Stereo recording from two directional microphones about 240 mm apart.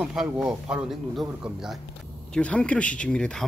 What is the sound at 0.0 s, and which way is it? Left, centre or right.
A man's voice, centre.